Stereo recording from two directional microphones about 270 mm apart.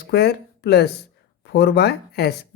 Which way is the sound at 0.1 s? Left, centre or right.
Left.